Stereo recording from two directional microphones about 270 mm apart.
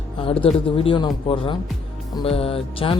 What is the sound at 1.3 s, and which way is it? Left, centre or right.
Music, centre.